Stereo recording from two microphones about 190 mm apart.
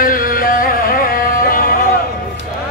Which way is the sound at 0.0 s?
45° left (ahead or behind).